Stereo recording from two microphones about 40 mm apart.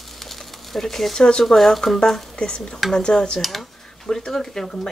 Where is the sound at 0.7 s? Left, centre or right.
Centre.